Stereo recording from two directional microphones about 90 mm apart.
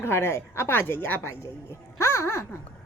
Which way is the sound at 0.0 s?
30° left (ahead or behind).